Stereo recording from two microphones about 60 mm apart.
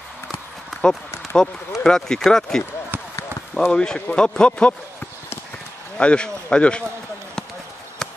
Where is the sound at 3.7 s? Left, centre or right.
Centre.